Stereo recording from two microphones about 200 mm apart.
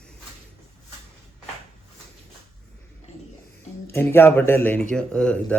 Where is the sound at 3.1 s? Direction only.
35° left (ahead or behind).